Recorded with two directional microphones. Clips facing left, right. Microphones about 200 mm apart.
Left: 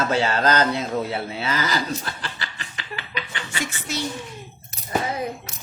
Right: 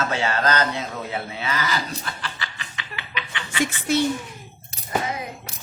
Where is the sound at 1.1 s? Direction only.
35° left (ahead or behind).